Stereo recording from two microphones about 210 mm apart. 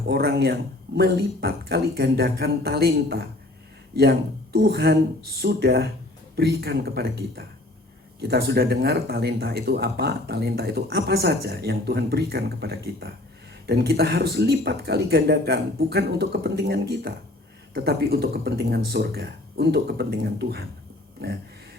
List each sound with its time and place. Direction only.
0.0 s speech: 50° right (ahead or behind)